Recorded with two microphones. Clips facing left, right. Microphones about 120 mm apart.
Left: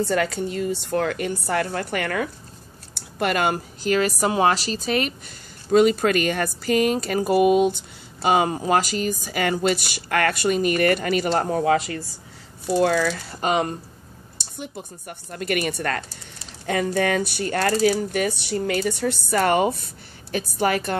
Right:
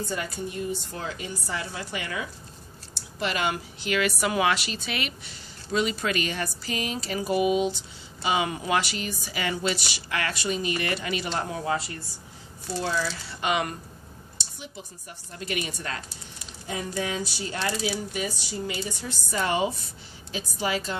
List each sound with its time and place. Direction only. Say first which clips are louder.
0.0 s a woman's voice: left 9 dB; 80° left; by 11.6 s 40° left (ahead or behind)
11.6 s speech: left 8 dB; 90° left
12.7 s speech: left 9 dB; 55° left (ahead or behind); by 13.7 s 35° left (ahead or behind)
14.4 s speech: left 8 dB; 55° left (ahead or behind)